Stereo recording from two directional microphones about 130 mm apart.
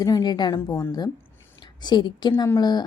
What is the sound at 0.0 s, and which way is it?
Speech, 30° left (ahead or behind).